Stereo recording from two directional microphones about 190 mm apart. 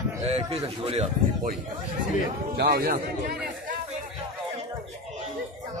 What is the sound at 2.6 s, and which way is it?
Speech, 55° right (ahead or behind).